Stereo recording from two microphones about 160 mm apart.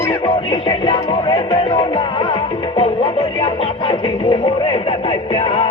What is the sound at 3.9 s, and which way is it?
Speech, 30° left (ahead or behind).